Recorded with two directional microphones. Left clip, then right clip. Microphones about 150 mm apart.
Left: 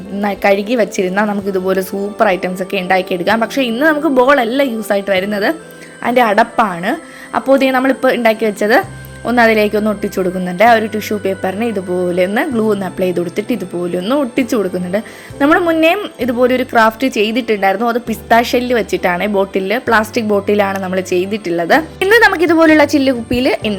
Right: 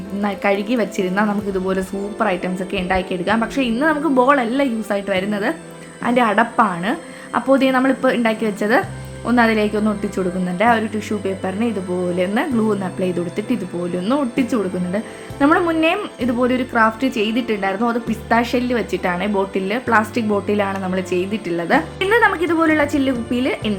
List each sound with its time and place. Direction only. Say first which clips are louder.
0.2 s a woman's voice: left 6 dB; 30° left (ahead or behind)